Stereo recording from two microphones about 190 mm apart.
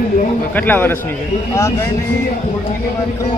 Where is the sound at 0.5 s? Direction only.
10° left (ahead or behind).